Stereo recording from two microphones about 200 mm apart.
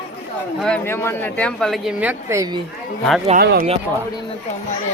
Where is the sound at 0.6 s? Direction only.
10° left (ahead or behind); by 2.6 s 20° right (ahead or behind).